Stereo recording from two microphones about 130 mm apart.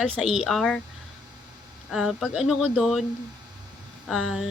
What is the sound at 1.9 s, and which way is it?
Speech, centre (ahead or behind).